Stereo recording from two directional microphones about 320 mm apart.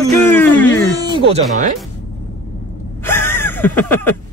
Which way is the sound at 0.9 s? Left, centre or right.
Centre.